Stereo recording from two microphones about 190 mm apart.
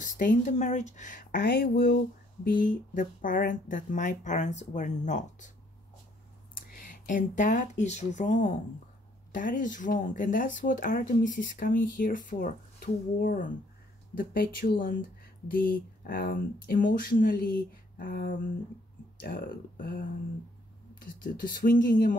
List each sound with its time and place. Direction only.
0.0 s speech: 40° left (ahead or behind)
1.3 s speech: 55° left (ahead or behind)
2.4 s speech: 45° left (ahead or behind)
6.8 s speech: 40° left (ahead or behind)
16.0 s speech: 50° left (ahead or behind)